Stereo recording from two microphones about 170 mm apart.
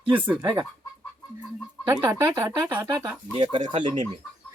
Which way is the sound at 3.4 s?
35° right (ahead or behind).